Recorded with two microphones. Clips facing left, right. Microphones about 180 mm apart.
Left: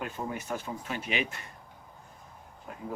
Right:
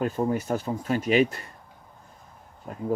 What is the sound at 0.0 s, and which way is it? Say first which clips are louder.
Speech: right 10 dB; 40° right (ahead or behind).